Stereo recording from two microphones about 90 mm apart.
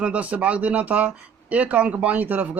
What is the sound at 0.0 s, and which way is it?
Speech, 15° right (ahead or behind).